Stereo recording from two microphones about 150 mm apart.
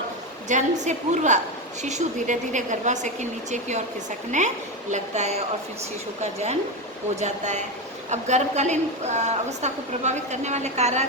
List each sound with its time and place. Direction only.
0.4 s a woman's voice: 55° right (ahead or behind)
7.2 s a woman's voice: 50° right (ahead or behind)